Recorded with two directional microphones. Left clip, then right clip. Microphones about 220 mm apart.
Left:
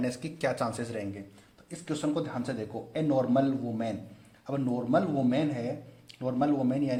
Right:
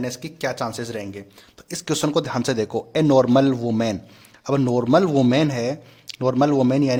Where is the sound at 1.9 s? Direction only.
40° right (ahead or behind).